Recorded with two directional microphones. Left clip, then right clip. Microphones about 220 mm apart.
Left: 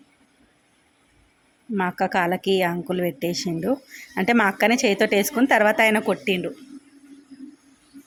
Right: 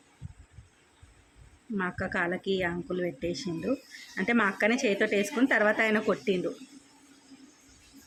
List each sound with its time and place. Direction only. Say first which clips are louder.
1.7 s a woman's voice: left 9 dB; 20° left (ahead or behind)